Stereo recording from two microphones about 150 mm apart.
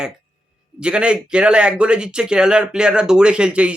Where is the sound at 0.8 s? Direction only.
5° right (ahead or behind).